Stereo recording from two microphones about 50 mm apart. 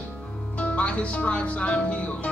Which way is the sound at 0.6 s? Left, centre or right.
Left.